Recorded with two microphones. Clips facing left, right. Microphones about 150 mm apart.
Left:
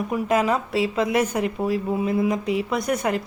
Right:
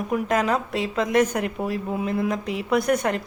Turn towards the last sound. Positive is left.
turn(degrees=0)  # may be behind; listen again after turning